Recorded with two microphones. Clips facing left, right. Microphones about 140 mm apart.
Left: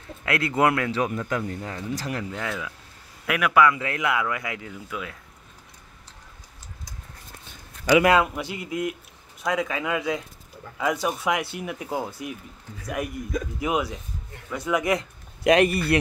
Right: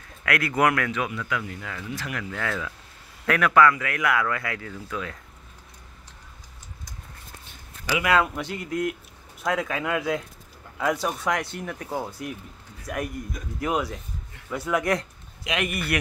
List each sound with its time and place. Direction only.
0.2 s speech: 25° left (ahead or behind)
2.3 s speech: 15° left (ahead or behind)
3.7 s speech: 25° left (ahead or behind)
8.2 s speech: 5° left (ahead or behind)
15.5 s speech: 30° left (ahead or behind)